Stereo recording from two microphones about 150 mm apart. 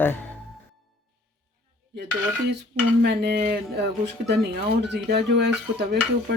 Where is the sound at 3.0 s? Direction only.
90° right.